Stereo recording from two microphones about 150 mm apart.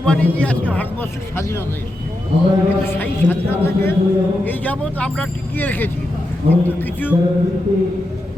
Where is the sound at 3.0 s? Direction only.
15° left (ahead or behind).